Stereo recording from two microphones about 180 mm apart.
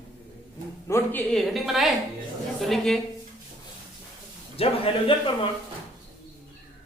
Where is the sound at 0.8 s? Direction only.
10° left (ahead or behind).